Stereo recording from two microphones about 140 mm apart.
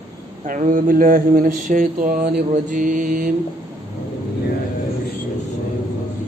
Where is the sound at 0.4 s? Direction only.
70° right (ahead or behind).